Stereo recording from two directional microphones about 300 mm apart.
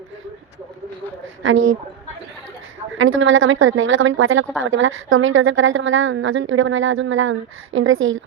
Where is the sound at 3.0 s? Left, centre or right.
Right.